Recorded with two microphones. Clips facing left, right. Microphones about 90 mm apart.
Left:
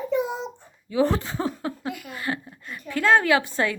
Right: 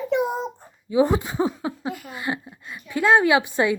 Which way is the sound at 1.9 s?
30° right (ahead or behind).